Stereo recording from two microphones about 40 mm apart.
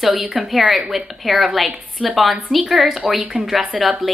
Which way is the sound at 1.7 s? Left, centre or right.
Right.